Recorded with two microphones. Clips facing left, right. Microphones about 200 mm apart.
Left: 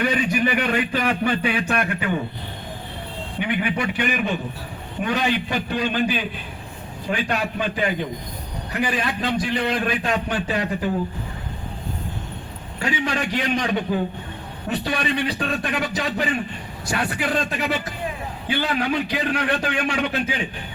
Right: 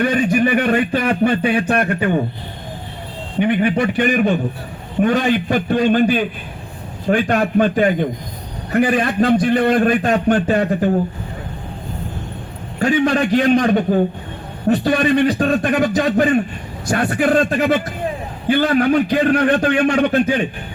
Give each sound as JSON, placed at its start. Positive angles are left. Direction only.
{"t": 0.0, "sound": "a man's voice", "side_deg": -50}
{"t": 3.4, "sound": "a man's voice", "side_deg": -50}
{"t": 12.8, "sound": "a man's voice", "side_deg": -50}